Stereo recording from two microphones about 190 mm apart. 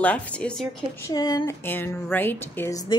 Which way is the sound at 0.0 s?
5° left (ahead or behind).